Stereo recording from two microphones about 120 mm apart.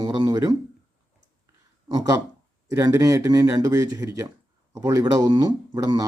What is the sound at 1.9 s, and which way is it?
Speech, 35° right (ahead or behind).